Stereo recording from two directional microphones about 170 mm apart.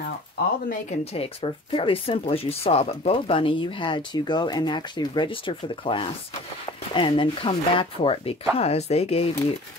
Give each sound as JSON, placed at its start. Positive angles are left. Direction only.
{"t": 1.1, "sound": "speech", "side_deg": 35}